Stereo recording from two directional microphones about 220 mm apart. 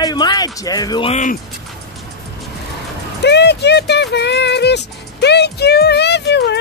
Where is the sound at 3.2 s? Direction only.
50° left (ahead or behind).